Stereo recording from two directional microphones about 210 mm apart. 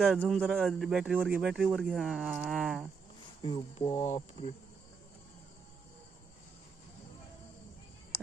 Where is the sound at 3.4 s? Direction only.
25° left (ahead or behind).